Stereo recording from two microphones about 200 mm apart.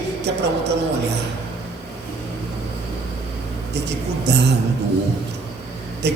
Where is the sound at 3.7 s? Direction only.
55° right (ahead or behind).